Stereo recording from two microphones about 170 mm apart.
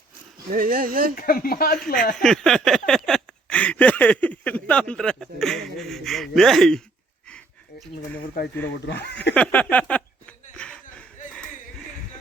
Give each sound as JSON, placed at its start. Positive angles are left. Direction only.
{"t": 0.5, "sound": "speech", "side_deg": -55}
{"t": 1.1, "sound": "speech", "side_deg": 55}
{"t": 2.2, "sound": "speech", "side_deg": 0}
{"t": 9.3, "sound": "a sound", "side_deg": 10}